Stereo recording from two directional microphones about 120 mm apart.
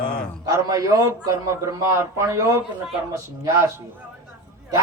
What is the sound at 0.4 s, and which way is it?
A man's voice, 30° right (ahead or behind).